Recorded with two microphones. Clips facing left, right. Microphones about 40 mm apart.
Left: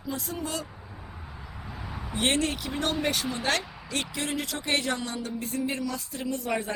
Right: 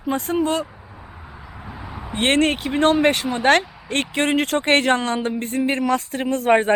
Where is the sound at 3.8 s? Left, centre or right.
Right.